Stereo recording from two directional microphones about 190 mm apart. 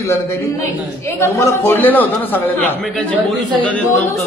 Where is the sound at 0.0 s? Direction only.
15° left (ahead or behind).